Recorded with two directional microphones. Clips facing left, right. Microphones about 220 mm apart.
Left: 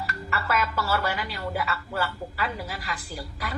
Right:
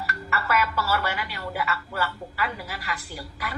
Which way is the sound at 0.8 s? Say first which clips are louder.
Even; 30° left (ahead or behind).